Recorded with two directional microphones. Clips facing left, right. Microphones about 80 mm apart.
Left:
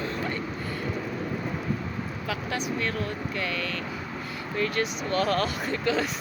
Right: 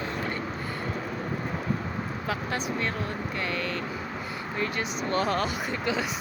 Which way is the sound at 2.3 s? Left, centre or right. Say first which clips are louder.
Even; right.